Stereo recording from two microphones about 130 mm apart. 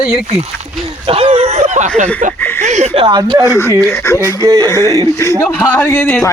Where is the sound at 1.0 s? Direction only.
45° right (ahead or behind); by 1.9 s 65° right (ahead or behind).